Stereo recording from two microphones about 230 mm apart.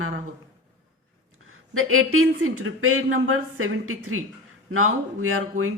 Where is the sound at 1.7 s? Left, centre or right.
Right.